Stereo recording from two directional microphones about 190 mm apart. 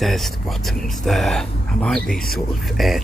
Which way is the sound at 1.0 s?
Centre (ahead or behind).